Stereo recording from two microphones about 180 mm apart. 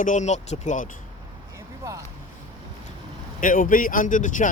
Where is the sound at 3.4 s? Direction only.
50° left (ahead or behind).